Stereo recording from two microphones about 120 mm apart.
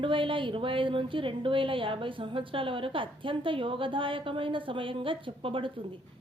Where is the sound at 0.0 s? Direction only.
45° right (ahead or behind).